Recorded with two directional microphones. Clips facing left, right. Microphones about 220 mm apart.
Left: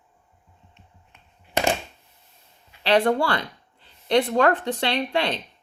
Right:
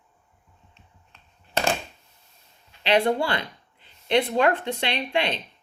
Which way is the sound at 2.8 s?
20° right (ahead or behind).